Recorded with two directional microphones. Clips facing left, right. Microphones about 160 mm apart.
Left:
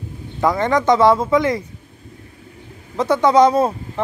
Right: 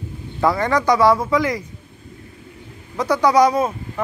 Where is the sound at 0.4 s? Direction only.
20° left (ahead or behind).